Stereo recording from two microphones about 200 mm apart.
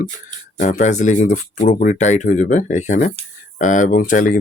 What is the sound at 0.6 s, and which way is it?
Speech, 40° left (ahead or behind).